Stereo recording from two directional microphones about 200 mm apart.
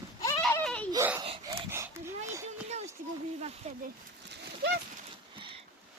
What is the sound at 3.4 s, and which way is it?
Speech, 35° right (ahead or behind).